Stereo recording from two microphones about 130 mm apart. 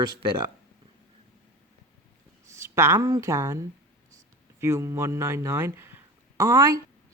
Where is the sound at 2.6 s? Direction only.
20° right (ahead or behind).